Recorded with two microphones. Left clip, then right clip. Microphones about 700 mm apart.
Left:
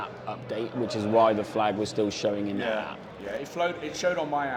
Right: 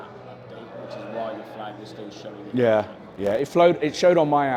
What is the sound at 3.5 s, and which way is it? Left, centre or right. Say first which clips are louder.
Speech: right 11 dB; right.